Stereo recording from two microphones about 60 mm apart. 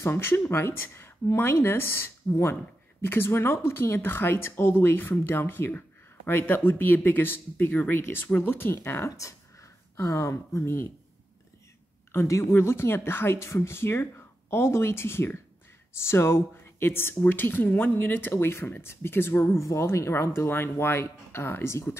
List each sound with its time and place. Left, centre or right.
0.0 s a woman's voice: left
12.3 s a woman's voice: left